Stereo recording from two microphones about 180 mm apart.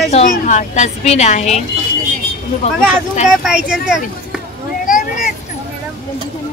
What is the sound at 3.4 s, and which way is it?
Speech, 5° right (ahead or behind).